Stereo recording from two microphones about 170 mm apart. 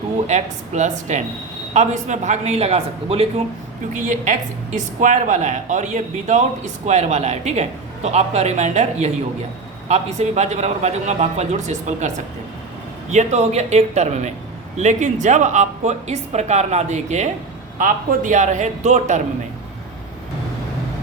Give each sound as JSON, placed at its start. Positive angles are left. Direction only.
{"t": 0.3, "sound": "a woman's voice", "side_deg": -45}